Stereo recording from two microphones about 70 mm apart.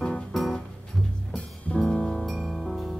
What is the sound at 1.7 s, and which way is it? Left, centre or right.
Music, centre.